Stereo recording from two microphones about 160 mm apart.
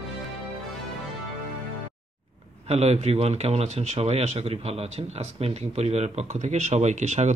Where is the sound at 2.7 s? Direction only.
40° right (ahead or behind).